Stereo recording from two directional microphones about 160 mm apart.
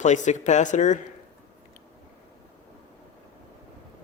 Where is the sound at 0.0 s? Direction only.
50° left (ahead or behind).